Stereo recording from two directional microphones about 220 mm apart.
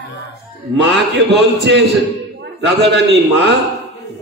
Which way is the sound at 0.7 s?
50° right (ahead or behind).